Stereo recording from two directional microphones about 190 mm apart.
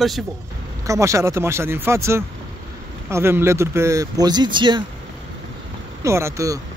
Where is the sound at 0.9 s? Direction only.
15° right (ahead or behind).